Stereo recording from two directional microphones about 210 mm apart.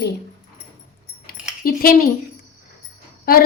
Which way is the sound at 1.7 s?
45° left (ahead or behind).